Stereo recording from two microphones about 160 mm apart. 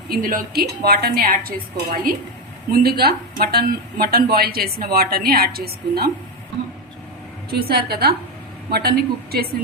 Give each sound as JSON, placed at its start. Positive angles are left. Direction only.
{"t": 0.1, "sound": "speech", "side_deg": -70}
{"t": 2.7, "sound": "speech", "side_deg": -75}
{"t": 7.6, "sound": "a woman's voice", "side_deg": -80}